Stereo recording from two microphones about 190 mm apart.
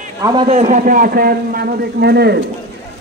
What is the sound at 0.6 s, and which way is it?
A man's voice, 40° right (ahead or behind).